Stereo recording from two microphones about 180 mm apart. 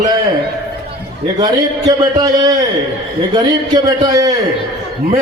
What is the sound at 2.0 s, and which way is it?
A man's voice, 20° right (ahead or behind).